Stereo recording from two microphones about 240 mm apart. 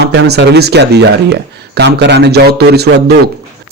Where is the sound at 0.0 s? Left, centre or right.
Right.